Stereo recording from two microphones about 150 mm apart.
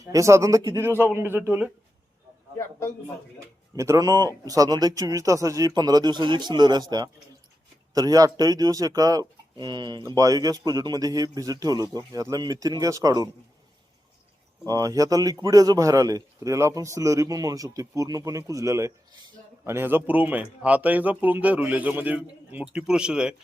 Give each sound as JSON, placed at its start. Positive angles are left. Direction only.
{"t": 0.0, "sound": "a man's voice", "side_deg": -20}
{"t": 3.8, "sound": "a man's voice", "side_deg": -20}
{"t": 14.7, "sound": "a man's voice", "side_deg": -25}